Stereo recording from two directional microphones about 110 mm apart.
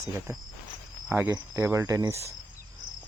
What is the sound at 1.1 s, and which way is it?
Speech, 15° right (ahead or behind).